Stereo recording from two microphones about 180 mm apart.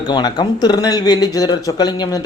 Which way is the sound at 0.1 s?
25° left (ahead or behind).